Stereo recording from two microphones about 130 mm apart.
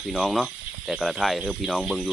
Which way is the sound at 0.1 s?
Centre (ahead or behind).